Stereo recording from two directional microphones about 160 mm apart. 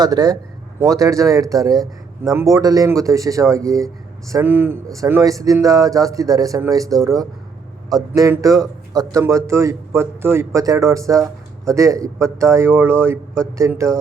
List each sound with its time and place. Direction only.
0.0 s speech: 25° right (ahead or behind)